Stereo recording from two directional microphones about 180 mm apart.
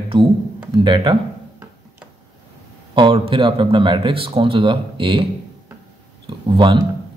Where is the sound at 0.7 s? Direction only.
25° right (ahead or behind).